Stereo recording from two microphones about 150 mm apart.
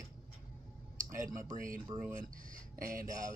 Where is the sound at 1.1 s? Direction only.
60° right (ahead or behind).